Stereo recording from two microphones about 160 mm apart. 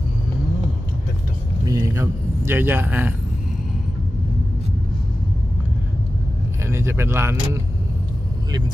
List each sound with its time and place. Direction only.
1.7 s a man's voice: 20° right (ahead or behind)
6.7 s speech: 15° right (ahead or behind)